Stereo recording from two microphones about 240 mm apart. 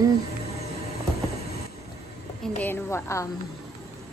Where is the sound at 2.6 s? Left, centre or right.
Centre.